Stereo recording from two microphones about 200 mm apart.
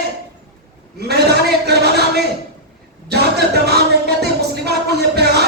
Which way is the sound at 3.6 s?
55° right (ahead or behind).